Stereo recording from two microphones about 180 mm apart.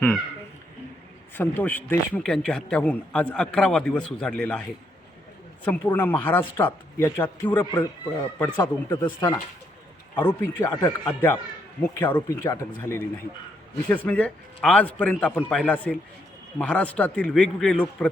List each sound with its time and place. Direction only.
1.4 s a man's voice: 10° left (ahead or behind)
5.6 s a man's voice: 10° left (ahead or behind)